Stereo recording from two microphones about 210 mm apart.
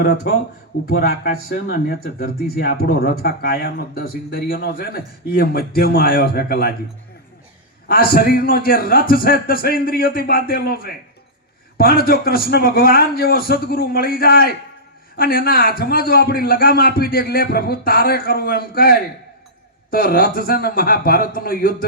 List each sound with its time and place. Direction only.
1.7 s speech: 45° left (ahead or behind)
7.9 s speech: 45° left (ahead or behind)